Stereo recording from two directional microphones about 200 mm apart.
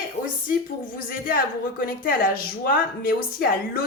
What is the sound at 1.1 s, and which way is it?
A woman's voice, 45° left (ahead or behind).